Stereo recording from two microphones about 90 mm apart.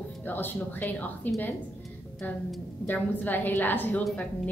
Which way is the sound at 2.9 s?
20° left (ahead or behind).